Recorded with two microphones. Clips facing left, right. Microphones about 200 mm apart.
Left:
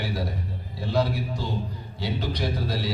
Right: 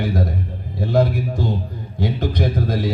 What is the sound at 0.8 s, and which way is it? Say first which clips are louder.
A man's voice: right 7 dB; 55° right (ahead or behind).